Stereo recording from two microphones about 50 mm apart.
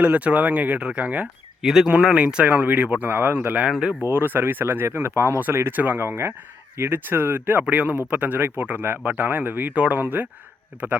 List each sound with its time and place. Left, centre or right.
0.0 s speech: right
1.6 s speech: centre
2.2 s speech: right
3.1 s speech: right
3.7 s speech: centre
4.0 s speech: right
5.7 s speech: right
6.0 s speech: right
6.9 s speech: right
7.7 s speech: right